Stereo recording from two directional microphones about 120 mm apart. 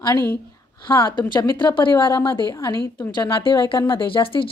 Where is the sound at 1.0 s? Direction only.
40° left (ahead or behind).